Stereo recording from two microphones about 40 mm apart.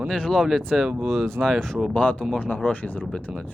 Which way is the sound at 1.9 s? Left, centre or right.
Left.